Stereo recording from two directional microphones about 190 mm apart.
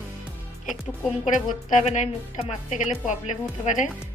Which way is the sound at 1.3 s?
40° left (ahead or behind).